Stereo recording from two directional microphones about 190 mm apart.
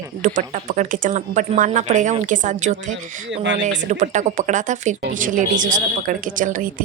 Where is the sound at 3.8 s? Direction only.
40° right (ahead or behind).